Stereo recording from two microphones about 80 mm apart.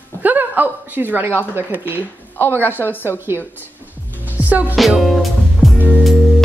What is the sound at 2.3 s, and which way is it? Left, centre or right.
Speech, left.